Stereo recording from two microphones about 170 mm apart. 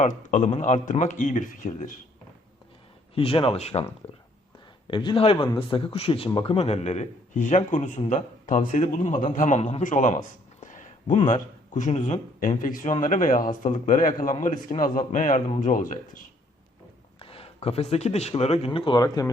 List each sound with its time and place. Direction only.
0.0 s speech: 45° left (ahead or behind)
3.2 s speech: 35° left (ahead or behind)
4.9 s speech: 30° left (ahead or behind); by 16.2 s 50° left (ahead or behind)
17.2 s speech: 35° left (ahead or behind)